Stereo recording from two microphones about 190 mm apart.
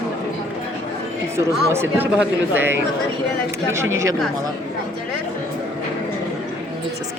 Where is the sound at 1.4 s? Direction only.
15° right (ahead or behind).